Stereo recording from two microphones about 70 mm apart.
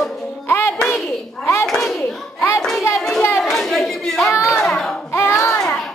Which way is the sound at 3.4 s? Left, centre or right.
Centre.